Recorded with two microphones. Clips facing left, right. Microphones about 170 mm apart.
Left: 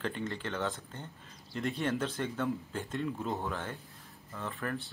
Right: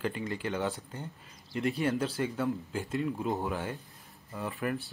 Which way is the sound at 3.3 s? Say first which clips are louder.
Right 3 dB; 15° right (ahead or behind).